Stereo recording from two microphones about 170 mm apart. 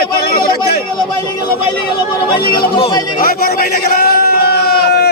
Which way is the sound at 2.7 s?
30° left (ahead or behind).